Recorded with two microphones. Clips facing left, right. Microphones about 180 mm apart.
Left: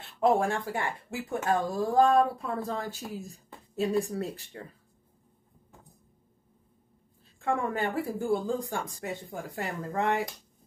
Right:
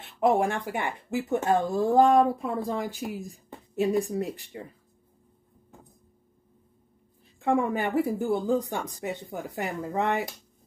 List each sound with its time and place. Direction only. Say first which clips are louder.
0.0 s speech: right 2 dB; 20° right (ahead or behind)
7.3 s speech: right 4 dB; 20° right (ahead or behind)